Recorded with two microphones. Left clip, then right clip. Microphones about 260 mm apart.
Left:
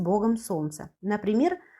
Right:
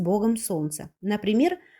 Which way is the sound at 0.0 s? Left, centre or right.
Right.